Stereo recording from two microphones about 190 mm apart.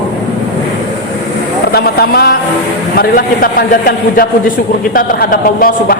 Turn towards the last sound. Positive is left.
turn(degrees=50)  # may be behind; listen again after turning